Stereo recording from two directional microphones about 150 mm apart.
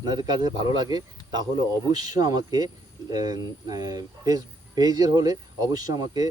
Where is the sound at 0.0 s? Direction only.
25° right (ahead or behind).